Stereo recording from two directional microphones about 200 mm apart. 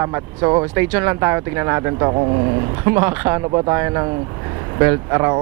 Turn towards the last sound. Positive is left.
turn(degrees=-15)  # may be behind; listen again after turning